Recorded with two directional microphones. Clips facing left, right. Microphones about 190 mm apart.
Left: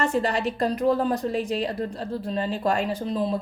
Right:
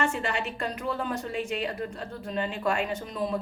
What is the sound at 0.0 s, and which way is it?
A woman's voice, 35° left (ahead or behind).